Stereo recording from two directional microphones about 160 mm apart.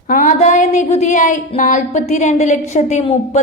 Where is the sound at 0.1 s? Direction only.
55° left (ahead or behind).